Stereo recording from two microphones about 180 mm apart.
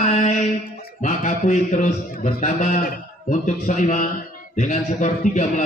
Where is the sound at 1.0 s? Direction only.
45° left (ahead or behind).